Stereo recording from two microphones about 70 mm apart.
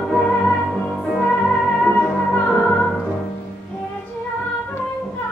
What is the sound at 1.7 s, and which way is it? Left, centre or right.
Music, centre.